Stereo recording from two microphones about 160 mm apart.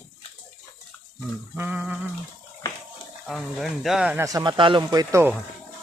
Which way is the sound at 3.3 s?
Centre (ahead or behind).